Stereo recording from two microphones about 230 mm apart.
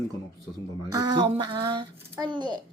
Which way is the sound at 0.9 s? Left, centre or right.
Centre.